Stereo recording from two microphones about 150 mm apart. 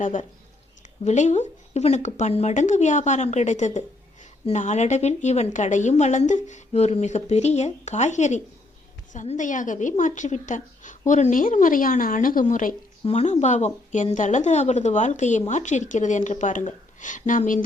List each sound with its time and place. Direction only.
0.0 s a woman's voice: 55° left (ahead or behind)
13.1 s a woman's voice: 45° left (ahead or behind)